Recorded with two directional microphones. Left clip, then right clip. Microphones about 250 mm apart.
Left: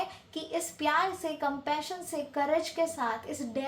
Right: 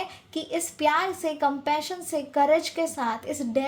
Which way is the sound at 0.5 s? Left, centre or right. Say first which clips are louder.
Right 5 dB; right.